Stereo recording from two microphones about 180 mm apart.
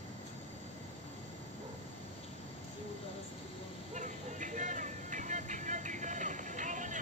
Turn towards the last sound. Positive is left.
turn(degrees=-45)  # may be behind; listen again after turning